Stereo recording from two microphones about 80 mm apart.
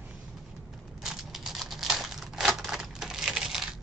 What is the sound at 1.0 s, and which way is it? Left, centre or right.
Crumpling, centre.